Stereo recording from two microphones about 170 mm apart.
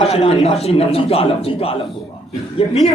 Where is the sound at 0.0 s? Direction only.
35° left (ahead or behind).